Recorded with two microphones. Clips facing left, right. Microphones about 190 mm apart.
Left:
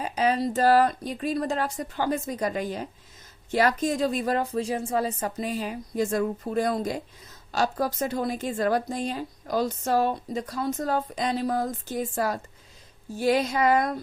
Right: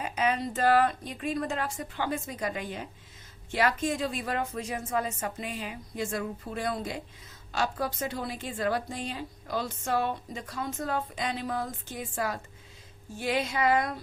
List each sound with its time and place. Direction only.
0.0 s a woman's voice: 35° left (ahead or behind)